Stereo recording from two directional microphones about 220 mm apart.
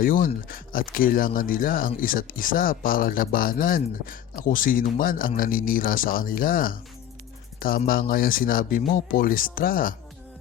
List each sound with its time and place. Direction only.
0.0 s speech: 40° left (ahead or behind)